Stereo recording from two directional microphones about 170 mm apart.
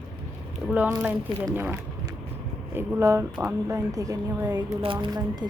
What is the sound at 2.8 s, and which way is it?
Speech, 15° right (ahead or behind).